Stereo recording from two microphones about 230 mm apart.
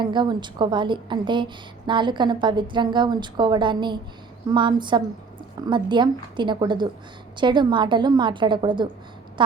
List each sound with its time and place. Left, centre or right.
0.0 s a woman's voice: centre